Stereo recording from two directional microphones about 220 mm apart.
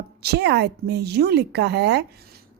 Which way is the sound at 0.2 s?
50° right (ahead or behind).